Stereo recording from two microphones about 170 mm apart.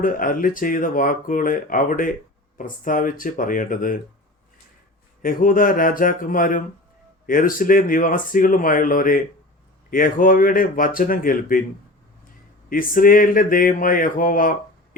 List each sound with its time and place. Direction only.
0.0 s speech: 55° left (ahead or behind)
5.2 s speech: 55° left (ahead or behind)
12.7 s speech: 55° left (ahead or behind)